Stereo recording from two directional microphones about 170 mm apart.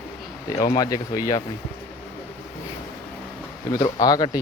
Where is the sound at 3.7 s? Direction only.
20° left (ahead or behind).